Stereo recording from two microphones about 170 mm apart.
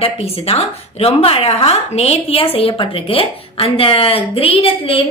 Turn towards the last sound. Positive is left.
turn(degrees=35)  # may be behind; listen again after turning